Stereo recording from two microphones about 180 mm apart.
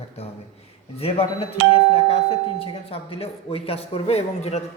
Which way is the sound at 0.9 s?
30° left (ahead or behind).